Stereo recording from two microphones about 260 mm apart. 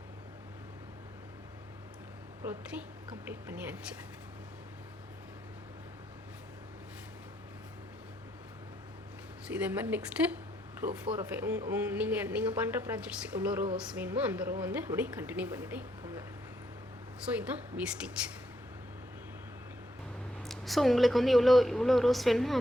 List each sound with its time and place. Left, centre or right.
2.4 s a woman's voice: centre
9.5 s a woman's voice: centre
17.4 s a woman's voice: centre
20.4 s a woman's voice: centre